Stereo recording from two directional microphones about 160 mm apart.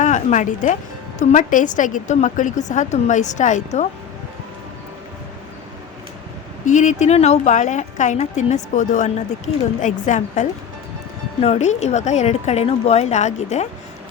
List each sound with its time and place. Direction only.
0.0 s speech: 50° left (ahead or behind)
6.7 s speech: 50° left (ahead or behind)